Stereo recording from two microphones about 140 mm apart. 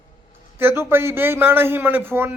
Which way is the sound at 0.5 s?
15° right (ahead or behind).